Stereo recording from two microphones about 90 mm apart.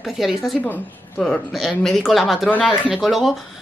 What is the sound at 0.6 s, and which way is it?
A woman's voice, 10° left (ahead or behind).